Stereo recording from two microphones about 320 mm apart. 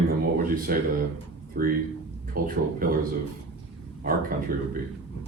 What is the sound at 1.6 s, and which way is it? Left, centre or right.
Speech, right.